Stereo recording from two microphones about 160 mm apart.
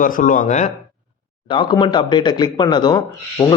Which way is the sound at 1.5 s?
30° left (ahead or behind).